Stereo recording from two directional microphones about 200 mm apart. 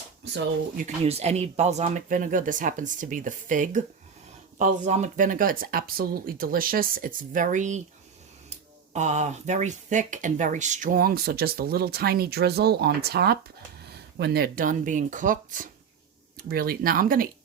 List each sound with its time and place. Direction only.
1.0 s speech: 30° right (ahead or behind)